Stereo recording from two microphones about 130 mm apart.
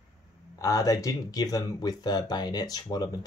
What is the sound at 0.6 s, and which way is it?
Speech, 25° left (ahead or behind).